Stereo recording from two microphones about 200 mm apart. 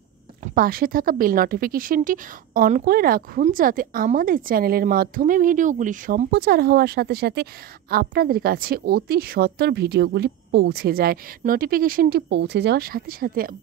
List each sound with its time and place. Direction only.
0.4 s speech: 45° right (ahead or behind)